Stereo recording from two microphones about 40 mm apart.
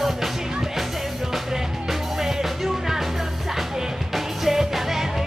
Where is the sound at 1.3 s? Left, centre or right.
Centre.